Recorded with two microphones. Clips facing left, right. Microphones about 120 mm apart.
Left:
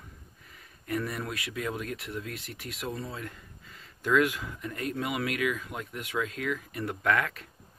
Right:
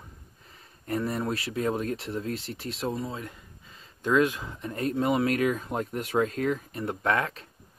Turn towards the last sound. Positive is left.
turn(degrees=-25)  # may be behind; listen again after turning